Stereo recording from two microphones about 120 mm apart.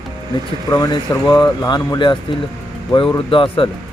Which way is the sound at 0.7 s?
35° left (ahead or behind).